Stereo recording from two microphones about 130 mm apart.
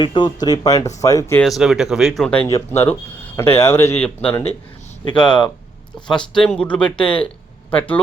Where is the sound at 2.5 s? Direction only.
25° left (ahead or behind).